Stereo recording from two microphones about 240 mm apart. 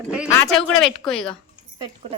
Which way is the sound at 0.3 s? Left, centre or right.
Centre.